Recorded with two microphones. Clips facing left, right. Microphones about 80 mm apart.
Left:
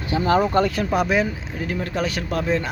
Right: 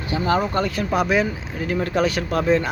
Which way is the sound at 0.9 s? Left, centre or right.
Centre.